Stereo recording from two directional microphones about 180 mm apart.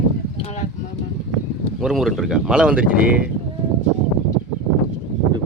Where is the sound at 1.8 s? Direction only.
Centre (ahead or behind).